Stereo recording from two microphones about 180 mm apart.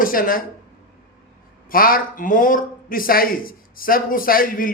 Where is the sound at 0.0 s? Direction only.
50° left (ahead or behind).